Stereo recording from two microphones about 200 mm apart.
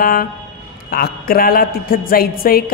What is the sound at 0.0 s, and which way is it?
Speech, 45° left (ahead or behind).